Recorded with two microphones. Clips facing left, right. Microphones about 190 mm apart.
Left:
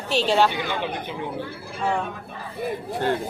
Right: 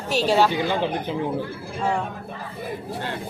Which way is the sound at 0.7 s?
35° right (ahead or behind).